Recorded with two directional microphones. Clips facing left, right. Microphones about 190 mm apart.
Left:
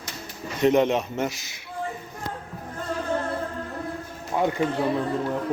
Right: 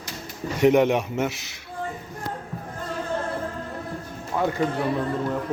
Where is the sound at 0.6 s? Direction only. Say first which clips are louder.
Right 2 dB; 10° right (ahead or behind).